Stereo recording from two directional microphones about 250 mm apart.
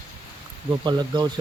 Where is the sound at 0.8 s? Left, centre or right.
Centre.